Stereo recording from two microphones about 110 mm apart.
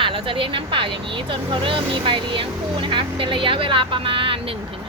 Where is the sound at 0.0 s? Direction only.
50° right (ahead or behind).